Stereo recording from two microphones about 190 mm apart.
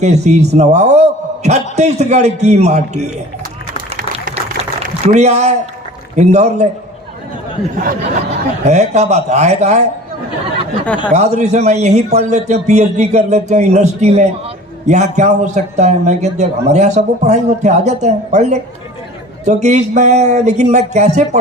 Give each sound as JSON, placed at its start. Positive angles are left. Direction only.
{"t": 0.0, "sound": "a man's voice", "side_deg": -35}
{"t": 5.0, "sound": "a man's voice", "side_deg": -35}
{"t": 8.3, "sound": "a man's voice", "side_deg": -35}
{"t": 11.1, "sound": "a man's voice", "side_deg": -35}